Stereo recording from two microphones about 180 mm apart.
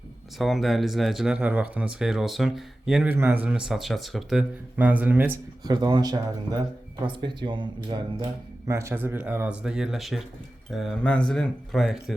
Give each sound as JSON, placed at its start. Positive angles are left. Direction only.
{"t": 0.3, "sound": "speech", "side_deg": 0}
{"t": 5.6, "sound": "speech", "side_deg": -25}